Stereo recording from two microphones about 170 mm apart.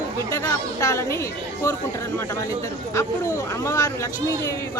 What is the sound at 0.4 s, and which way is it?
Speech, 20° left (ahead or behind).